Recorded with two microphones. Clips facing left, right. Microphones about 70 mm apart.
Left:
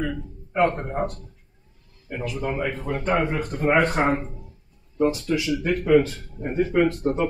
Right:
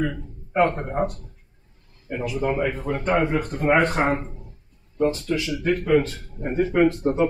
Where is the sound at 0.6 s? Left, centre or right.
Centre.